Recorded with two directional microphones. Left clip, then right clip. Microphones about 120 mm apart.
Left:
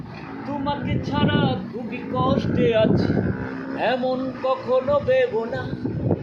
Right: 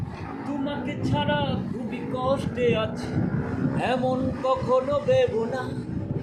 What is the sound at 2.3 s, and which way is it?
Speech, 25° right (ahead or behind).